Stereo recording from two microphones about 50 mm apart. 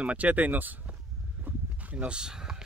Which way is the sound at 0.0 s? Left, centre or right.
Right.